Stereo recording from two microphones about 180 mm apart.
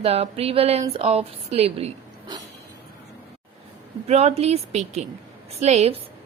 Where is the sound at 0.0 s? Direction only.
35° right (ahead or behind).